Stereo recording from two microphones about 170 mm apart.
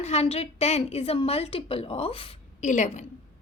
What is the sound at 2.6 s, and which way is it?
Speech, 45° left (ahead or behind).